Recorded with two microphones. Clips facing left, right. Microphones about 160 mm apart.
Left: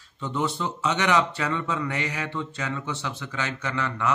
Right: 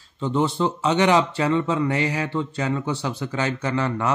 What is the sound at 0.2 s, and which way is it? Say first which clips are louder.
Speech: right 6 dB; 30° right (ahead or behind).